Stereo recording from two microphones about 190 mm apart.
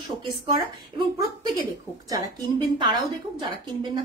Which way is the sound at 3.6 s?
25° right (ahead or behind).